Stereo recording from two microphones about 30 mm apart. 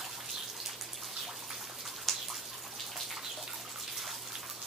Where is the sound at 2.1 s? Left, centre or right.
Centre.